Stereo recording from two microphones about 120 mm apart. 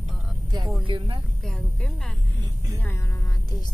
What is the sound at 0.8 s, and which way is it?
Speech, 45° right (ahead or behind).